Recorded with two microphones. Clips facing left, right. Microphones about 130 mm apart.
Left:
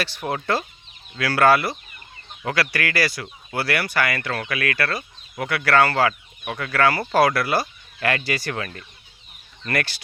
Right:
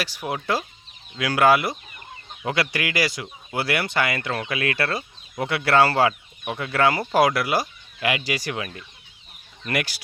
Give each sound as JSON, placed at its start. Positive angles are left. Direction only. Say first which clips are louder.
{"t": 0.0, "sound": "speech", "louder": "left 2 dB", "side_deg": -10}